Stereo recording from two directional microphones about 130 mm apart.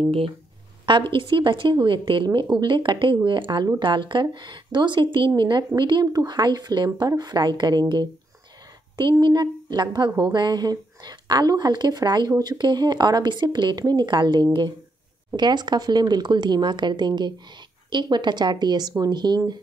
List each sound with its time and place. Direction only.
0.8 s speech: 40° right (ahead or behind)
8.9 s speech: 35° right (ahead or behind)